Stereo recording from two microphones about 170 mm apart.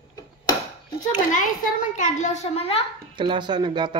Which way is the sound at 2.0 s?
45° left (ahead or behind).